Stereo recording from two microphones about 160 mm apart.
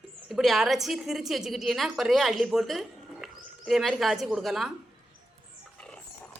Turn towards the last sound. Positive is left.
turn(degrees=5)  # may be behind; listen again after turning